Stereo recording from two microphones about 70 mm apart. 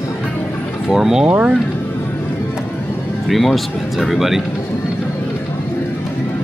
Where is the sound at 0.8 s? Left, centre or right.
Centre.